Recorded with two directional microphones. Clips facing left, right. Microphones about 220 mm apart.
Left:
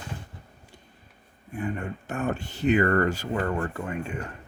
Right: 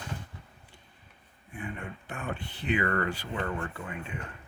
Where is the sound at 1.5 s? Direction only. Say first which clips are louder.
Left 8 dB; 40° left (ahead or behind).